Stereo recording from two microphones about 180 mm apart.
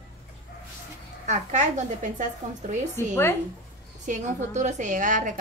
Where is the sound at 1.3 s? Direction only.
40° right (ahead or behind).